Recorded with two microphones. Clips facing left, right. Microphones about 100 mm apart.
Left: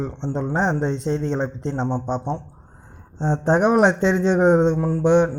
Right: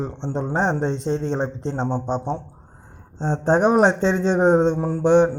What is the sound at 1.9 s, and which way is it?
Speech, centre (ahead or behind).